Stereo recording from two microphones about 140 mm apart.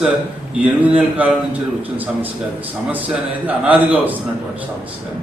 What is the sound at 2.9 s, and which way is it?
A man's voice, 10° right (ahead or behind).